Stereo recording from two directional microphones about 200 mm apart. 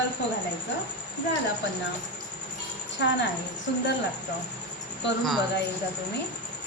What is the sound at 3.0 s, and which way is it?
Speech, 65° left (ahead or behind).